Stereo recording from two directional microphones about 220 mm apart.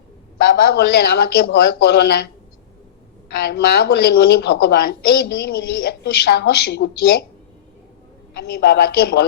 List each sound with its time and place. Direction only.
0.6 s a woman's voice: 50° left (ahead or behind)
3.4 s a woman's voice: 50° left (ahead or behind)
8.4 s a woman's voice: 50° left (ahead or behind)